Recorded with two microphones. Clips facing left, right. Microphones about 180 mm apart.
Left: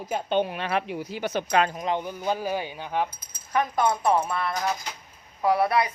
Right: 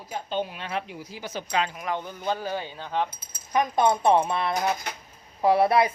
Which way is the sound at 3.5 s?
15° right (ahead or behind).